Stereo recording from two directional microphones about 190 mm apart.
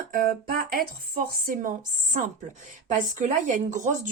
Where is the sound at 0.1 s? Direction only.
50° right (ahead or behind).